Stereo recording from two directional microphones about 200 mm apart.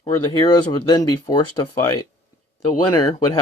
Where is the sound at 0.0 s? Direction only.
20° left (ahead or behind).